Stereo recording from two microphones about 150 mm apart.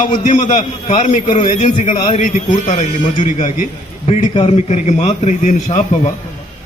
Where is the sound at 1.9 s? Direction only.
40° left (ahead or behind).